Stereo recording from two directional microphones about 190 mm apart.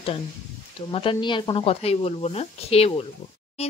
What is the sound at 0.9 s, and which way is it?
Speech, 25° left (ahead or behind).